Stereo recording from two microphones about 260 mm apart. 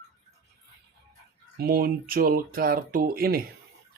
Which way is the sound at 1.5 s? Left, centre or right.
Right.